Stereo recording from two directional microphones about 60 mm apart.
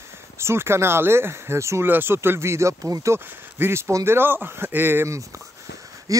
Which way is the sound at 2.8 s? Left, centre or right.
Right.